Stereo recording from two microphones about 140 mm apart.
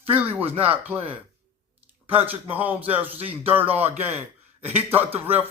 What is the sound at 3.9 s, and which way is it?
Speech, 50° right (ahead or behind).